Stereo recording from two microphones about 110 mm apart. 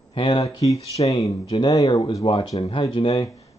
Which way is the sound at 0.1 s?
50° left (ahead or behind).